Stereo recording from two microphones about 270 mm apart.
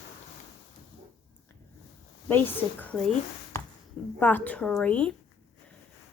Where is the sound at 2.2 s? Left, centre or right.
Centre.